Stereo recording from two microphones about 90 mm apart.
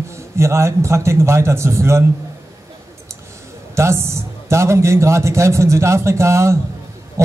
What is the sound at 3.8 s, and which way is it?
A man's voice, 30° right (ahead or behind).